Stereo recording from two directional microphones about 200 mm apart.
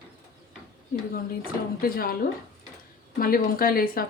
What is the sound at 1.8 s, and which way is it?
Speech, 45° left (ahead or behind).